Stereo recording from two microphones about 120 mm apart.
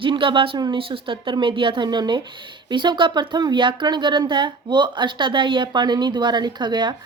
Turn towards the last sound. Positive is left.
turn(degrees=-40)  # may be behind; listen again after turning